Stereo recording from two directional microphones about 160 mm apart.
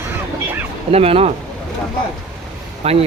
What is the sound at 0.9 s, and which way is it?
Speech, 40° right (ahead or behind).